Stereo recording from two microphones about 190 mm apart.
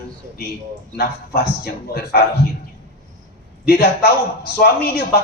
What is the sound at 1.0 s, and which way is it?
A man's voice, 55° left (ahead or behind).